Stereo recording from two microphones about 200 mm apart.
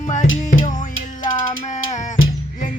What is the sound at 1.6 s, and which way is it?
Music, 35° left (ahead or behind).